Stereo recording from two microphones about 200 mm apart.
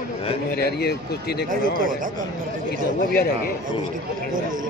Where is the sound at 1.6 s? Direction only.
45° right (ahead or behind).